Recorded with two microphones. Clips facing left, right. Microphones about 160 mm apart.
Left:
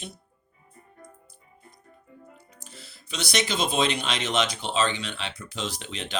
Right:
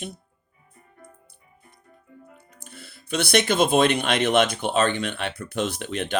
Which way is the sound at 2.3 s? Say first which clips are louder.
Right 3 dB; 55° right (ahead or behind).